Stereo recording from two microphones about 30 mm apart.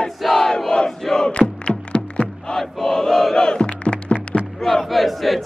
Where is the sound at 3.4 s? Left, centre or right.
Left.